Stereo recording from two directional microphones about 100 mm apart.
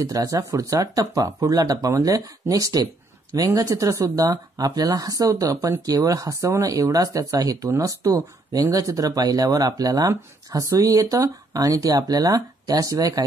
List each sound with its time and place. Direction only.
0.0 s speech: 35° right (ahead or behind)